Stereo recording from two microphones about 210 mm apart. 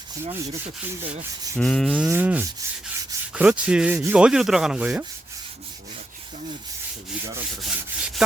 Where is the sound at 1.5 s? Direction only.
5° left (ahead or behind).